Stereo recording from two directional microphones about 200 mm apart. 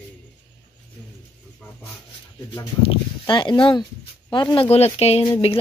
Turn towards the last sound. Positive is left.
turn(degrees=30)  # may be behind; listen again after turning